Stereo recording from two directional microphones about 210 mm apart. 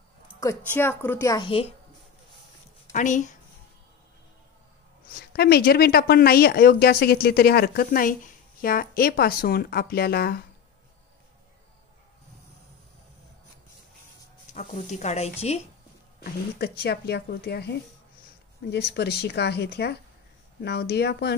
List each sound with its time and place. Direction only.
0.4 s a woman's voice: 15° left (ahead or behind)
2.9 s a woman's voice: 35° left (ahead or behind)
5.0 s speech: 45° left (ahead or behind)
14.5 s speech: 35° left (ahead or behind)
16.5 s speech: 50° left (ahead or behind)